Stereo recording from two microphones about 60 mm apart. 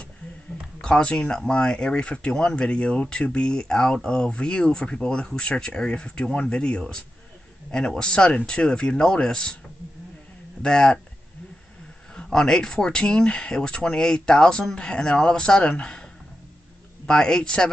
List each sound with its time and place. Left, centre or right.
0.7 s speech: centre
10.6 s speech: centre
12.2 s speech: centre